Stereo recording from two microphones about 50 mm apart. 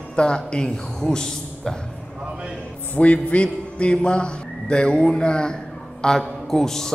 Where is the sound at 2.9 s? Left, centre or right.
Left.